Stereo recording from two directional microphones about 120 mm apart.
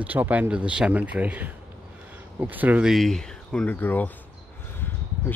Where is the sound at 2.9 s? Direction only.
Centre (ahead or behind).